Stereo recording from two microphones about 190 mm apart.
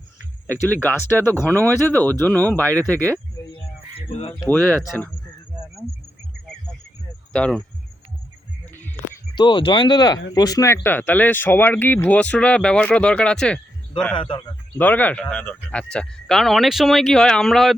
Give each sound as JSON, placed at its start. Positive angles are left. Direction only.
{"t": 0.7, "sound": "speech", "side_deg": 10}
{"t": 4.1, "sound": "speech", "side_deg": 30}
{"t": 4.4, "sound": "speech", "side_deg": 10}
{"t": 7.3, "sound": "speech", "side_deg": 5}
{"t": 8.7, "sound": "music", "side_deg": 10}
{"t": 9.3, "sound": "speech", "side_deg": 25}
{"t": 14.2, "sound": "speech", "side_deg": 25}
{"t": 14.8, "sound": "speech", "side_deg": 10}